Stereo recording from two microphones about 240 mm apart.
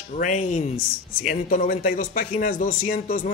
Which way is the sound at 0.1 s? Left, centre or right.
Left.